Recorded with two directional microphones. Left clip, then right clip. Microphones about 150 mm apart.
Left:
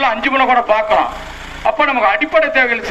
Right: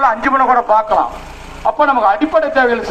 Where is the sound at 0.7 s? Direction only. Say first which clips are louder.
Right 1 dB; 10° left (ahead or behind).